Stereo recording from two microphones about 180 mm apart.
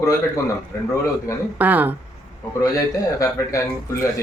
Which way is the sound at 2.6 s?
20° left (ahead or behind).